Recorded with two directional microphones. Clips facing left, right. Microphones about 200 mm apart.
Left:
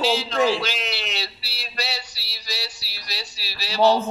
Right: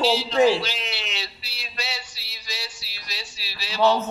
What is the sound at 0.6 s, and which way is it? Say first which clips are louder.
Speech: left 2 dB; 90° left.